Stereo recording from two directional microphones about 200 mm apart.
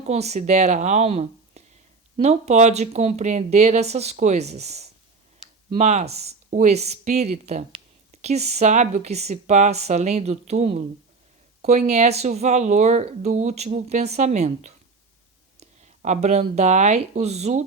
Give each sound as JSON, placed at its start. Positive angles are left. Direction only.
{"t": 0.0, "sound": "speech", "side_deg": -35}